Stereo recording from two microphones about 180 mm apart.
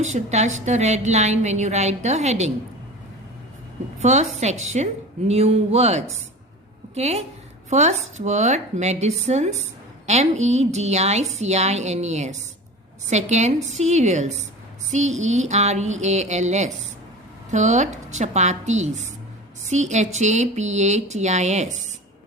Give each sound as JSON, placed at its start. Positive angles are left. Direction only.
{"t": 0.0, "sound": "a woman's voice", "side_deg": -40}
{"t": 4.0, "sound": "a woman's voice", "side_deg": -40}